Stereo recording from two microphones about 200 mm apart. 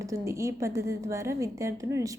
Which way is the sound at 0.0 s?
15° right (ahead or behind).